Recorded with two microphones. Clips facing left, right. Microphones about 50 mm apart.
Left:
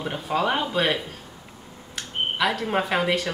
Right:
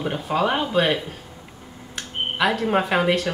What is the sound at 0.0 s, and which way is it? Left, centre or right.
A woman's voice, centre.